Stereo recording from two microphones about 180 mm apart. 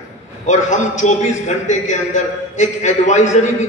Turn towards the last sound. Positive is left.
turn(degrees=40)  # may be behind; listen again after turning